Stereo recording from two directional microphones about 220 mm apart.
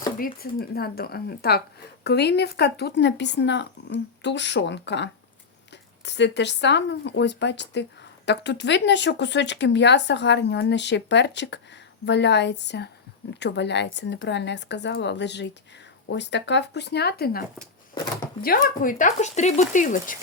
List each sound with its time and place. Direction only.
0.2 s speech: 40° left (ahead or behind)
18.4 s speech: 40° left (ahead or behind)